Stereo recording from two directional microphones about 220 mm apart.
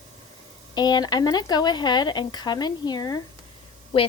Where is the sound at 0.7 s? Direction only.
20° left (ahead or behind).